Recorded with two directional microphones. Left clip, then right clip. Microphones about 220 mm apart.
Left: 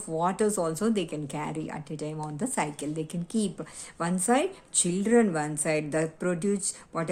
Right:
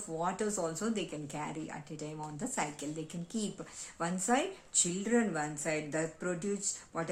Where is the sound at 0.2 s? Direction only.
35° left (ahead or behind).